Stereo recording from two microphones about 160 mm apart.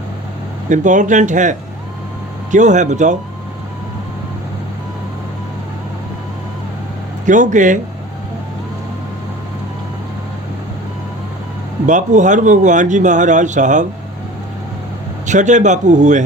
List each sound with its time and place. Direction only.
0.7 s speech: 50° right (ahead or behind)
7.3 s speech: 50° right (ahead or behind)
11.9 s speech: 50° right (ahead or behind)
15.3 s speech: 50° right (ahead or behind)